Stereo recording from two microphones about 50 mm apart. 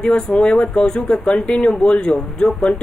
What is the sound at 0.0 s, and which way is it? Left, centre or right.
Speech, centre.